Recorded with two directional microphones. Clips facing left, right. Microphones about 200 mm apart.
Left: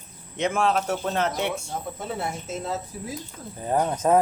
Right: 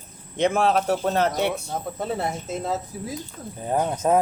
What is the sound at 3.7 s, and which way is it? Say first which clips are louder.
Speech: even; 10° right (ahead or behind).